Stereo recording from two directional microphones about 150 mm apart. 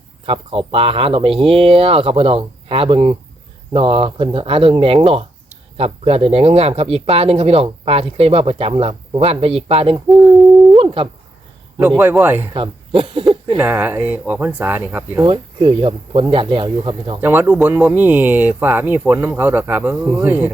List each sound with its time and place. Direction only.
0.3 s speech: 40° right (ahead or behind)
11.8 s speech: 15° right (ahead or behind)
12.5 s a sound: 35° right (ahead or behind)
13.6 s speech: 15° right (ahead or behind)
15.3 s speech: 40° right (ahead or behind)
17.2 s speech: 15° right (ahead or behind)